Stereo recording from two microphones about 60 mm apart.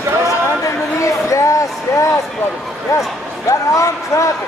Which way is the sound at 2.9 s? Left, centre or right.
Left.